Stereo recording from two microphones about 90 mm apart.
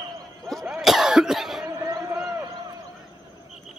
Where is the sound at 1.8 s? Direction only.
40° right (ahead or behind).